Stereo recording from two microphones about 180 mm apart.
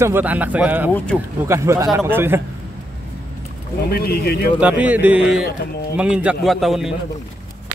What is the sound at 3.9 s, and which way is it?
Speech, 60° left (ahead or behind).